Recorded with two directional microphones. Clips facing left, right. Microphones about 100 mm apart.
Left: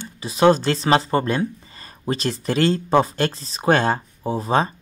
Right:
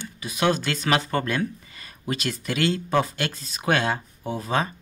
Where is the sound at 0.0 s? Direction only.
30° left (ahead or behind).